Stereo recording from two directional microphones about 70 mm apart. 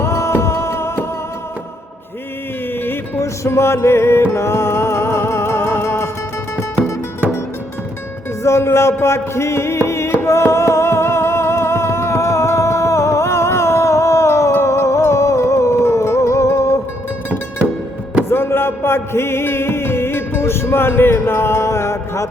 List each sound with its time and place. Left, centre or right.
0.0 s music: left
2.7 s music: left
3.2 s music: left
8.4 s music: left
18.3 s music: left